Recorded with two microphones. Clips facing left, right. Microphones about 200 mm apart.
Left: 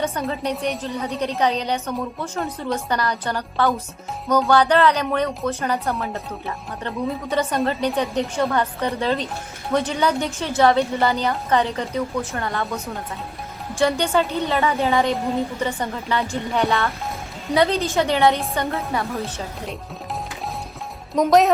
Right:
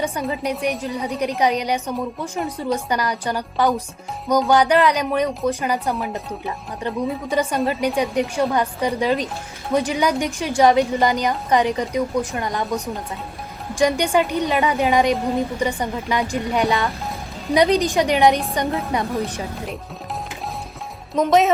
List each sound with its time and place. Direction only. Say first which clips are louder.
0.0 s a woman's voice: right 1 dB; 10° right (ahead or behind)
21.2 s speech: left 1 dB; centre (ahead or behind)